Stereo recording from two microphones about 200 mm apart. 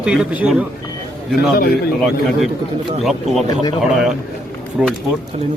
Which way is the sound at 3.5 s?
20° left (ahead or behind).